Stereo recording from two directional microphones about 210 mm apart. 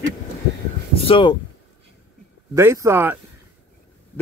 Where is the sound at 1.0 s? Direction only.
25° left (ahead or behind).